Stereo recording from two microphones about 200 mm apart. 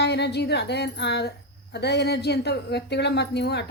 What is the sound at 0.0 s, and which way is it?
A woman's voice, 55° left (ahead or behind).